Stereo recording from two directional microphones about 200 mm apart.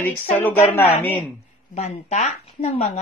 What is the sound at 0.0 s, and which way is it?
Speech, 10° left (ahead or behind).